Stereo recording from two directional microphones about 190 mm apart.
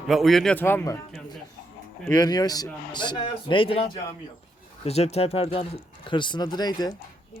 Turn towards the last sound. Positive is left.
turn(degrees=20)  # may be behind; listen again after turning